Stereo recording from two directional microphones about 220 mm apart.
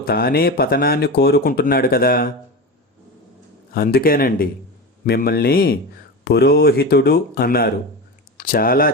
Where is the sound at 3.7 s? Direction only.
45° left (ahead or behind).